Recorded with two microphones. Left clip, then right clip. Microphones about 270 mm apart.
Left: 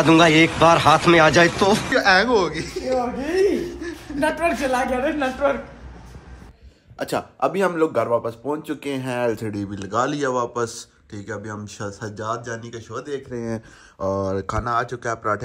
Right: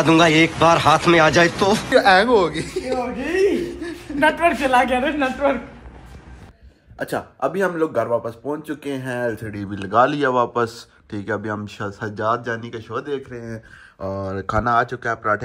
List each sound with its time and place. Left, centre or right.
0.0 s a man's voice: centre
5.0 s a man's voice: right
7.0 s speech: centre